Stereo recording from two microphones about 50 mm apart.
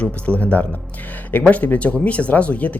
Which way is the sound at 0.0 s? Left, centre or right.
Left.